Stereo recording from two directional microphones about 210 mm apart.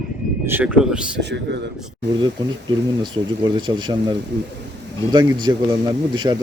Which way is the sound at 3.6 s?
20° right (ahead or behind).